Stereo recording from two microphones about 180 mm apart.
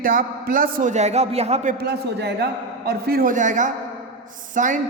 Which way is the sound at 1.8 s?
65° right (ahead or behind).